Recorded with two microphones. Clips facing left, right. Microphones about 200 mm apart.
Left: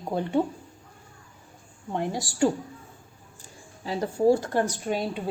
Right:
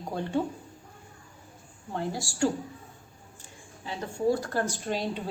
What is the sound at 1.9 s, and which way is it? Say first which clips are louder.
Speech: left 3 dB; 20° left (ahead or behind).